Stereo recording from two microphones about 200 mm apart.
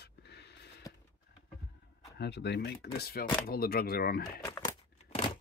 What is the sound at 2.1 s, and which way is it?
Speech, 55° left (ahead or behind).